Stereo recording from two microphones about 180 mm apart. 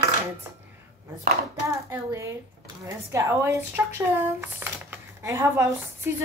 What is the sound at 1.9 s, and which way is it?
A woman's voice, 15° right (ahead or behind).